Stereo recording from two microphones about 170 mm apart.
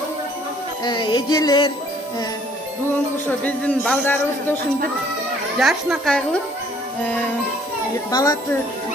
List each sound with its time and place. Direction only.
0.8 s music: 25° left (ahead or behind)
3.4 s a man's voice: 5° left (ahead or behind)
5.6 s speech: centre (ahead or behind)
8.1 s music: 20° left (ahead or behind)